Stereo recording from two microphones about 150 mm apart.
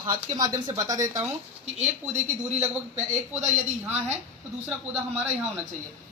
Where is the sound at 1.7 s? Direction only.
50° right (ahead or behind).